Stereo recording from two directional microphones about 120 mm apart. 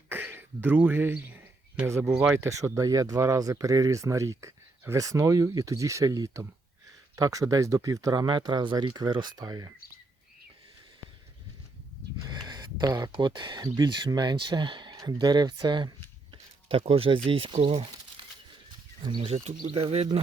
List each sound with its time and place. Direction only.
0.1 s a sound: 20° right (ahead or behind)
2.2 s speech: 25° right (ahead or behind)
12.2 s speech: 40° right (ahead or behind)
13.7 s speech: 25° right (ahead or behind)
13.9 s speech: 40° right (ahead or behind)
16.6 s speech: 55° right (ahead or behind)
18.2 s bird flight: 45° right (ahead or behind)
19.0 s speech: 45° right (ahead or behind)
19.5 s speech: 55° right (ahead or behind)